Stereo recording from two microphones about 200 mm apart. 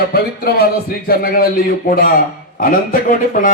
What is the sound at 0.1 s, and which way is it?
Speech, 50° left (ahead or behind).